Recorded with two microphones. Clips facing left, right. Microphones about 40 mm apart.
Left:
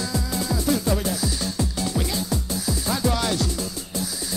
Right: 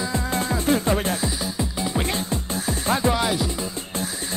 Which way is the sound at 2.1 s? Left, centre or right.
Right.